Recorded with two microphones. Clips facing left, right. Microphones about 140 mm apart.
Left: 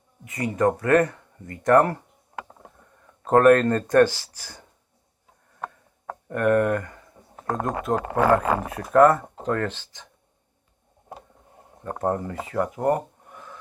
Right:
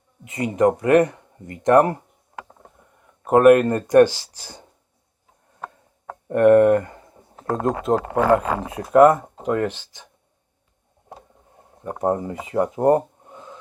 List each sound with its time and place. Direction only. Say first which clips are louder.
0.3 s speech: right 4 dB; 20° right (ahead or behind)
3.2 s speech: right 3 dB; 10° right (ahead or behind)
6.2 s speech: right 7 dB; 25° right (ahead or behind)
11.8 s speech: right 3 dB; 15° right (ahead or behind)